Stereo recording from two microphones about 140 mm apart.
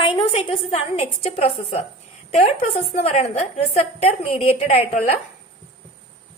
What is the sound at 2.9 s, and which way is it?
A woman's voice, 50° left (ahead or behind).